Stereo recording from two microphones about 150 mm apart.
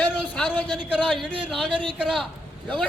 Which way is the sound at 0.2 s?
10° left (ahead or behind).